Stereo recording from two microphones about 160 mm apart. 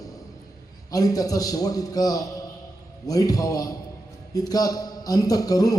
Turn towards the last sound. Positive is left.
turn(degrees=20)  # may be behind; listen again after turning